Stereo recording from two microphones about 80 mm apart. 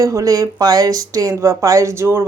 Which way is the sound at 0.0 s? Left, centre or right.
Right.